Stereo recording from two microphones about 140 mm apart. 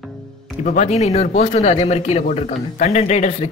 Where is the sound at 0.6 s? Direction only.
60° left (ahead or behind).